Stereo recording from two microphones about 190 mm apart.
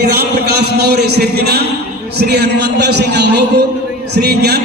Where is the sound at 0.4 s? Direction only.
60° right (ahead or behind).